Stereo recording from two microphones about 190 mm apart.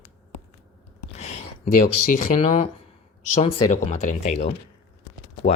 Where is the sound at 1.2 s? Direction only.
35° left (ahead or behind).